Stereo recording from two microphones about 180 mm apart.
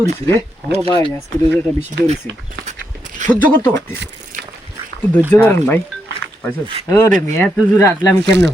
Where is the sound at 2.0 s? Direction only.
40° right (ahead or behind).